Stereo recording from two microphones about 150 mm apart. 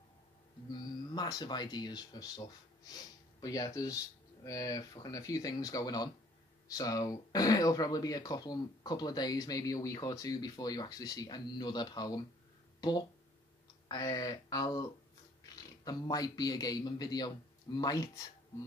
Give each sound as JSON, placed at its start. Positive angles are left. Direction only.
{"t": 0.7, "sound": "speech", "side_deg": 25}
{"t": 13.8, "sound": "speech", "side_deg": 25}